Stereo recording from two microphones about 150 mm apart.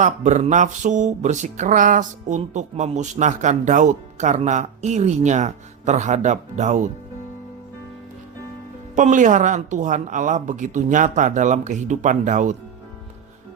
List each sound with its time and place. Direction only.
0.0 s music: 55° right (ahead or behind)
9.0 s a woman's voice: 55° right (ahead or behind)